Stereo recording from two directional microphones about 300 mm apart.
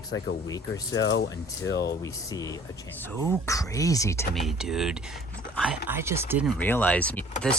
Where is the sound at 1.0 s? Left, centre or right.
Left.